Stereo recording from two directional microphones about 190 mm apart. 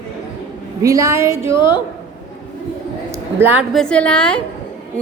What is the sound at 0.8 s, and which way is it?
Speech, 15° right (ahead or behind).